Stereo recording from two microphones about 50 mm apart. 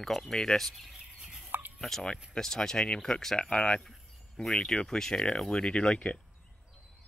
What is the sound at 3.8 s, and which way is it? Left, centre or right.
Speech, centre.